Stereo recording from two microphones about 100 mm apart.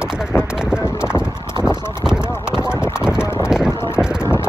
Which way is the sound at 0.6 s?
10° right (ahead or behind).